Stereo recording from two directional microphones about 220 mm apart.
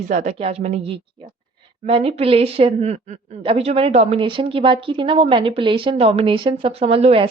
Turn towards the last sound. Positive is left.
turn(degrees=-25)  # may be behind; listen again after turning